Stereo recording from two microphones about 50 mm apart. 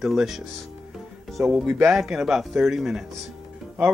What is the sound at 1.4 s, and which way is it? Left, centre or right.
Speech, right.